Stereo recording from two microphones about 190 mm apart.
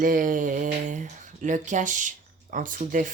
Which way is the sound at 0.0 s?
45° right (ahead or behind).